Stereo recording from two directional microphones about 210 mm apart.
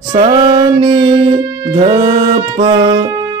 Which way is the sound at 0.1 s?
20° right (ahead or behind).